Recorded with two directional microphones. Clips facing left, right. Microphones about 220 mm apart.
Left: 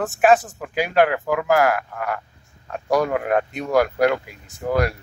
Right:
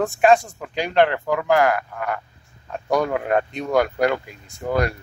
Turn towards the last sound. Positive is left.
turn(degrees=5)  # may be behind; listen again after turning